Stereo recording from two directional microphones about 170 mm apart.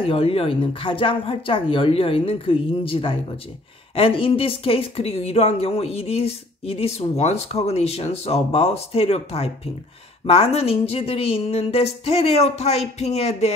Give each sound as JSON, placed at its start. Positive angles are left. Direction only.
{"t": 0.0, "sound": "a woman's voice", "side_deg": 35}